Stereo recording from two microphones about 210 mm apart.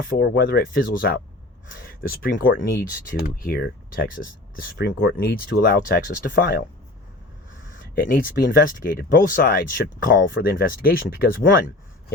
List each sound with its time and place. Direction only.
0.1 s speech: 50° left (ahead or behind)
7.9 s speech: 45° left (ahead or behind)
10.1 s speech: 60° left (ahead or behind)
10.4 s speech: 45° left (ahead or behind)